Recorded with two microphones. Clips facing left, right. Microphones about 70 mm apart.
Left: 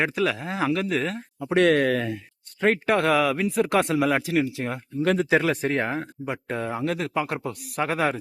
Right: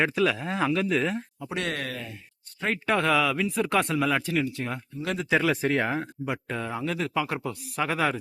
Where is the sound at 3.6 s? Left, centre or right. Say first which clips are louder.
Left 3 dB; centre.